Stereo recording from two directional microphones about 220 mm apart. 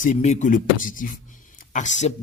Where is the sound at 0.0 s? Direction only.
35° left (ahead or behind).